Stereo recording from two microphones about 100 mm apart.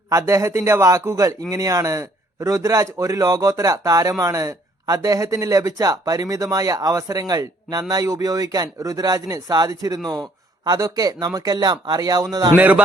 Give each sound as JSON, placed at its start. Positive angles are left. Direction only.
{"t": 0.1, "sound": "speech", "side_deg": -35}
{"t": 12.5, "sound": "speech", "side_deg": -15}